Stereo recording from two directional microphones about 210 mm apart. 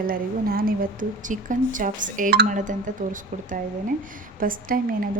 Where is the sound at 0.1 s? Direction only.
45° right (ahead or behind).